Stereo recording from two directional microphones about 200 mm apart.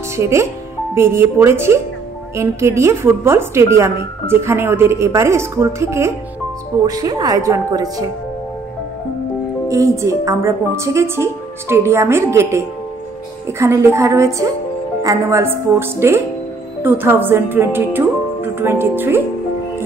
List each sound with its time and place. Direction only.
0.1 s a woman's voice: 15° right (ahead or behind)
9.7 s a woman's voice: 15° right (ahead or behind)